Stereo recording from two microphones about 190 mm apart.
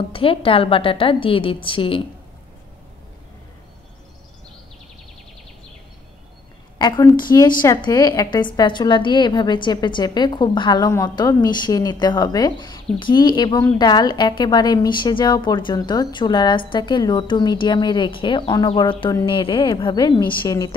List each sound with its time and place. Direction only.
0.1 s a woman's voice: 30° left (ahead or behind)
6.8 s a woman's voice: 20° left (ahead or behind)